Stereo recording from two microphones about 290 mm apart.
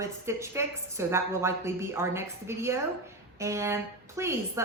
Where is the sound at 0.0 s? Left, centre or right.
Centre.